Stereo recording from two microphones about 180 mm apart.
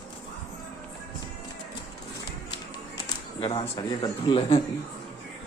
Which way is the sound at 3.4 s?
25° left (ahead or behind).